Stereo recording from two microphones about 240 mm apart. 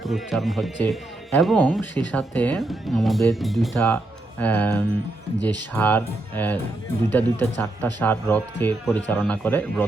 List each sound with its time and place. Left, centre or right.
0.0 s speech: centre
5.4 s speech: centre
5.7 s speech: centre